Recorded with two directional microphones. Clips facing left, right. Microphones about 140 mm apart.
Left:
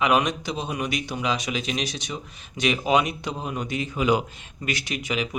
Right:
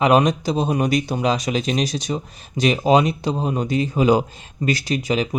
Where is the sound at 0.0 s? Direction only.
35° right (ahead or behind).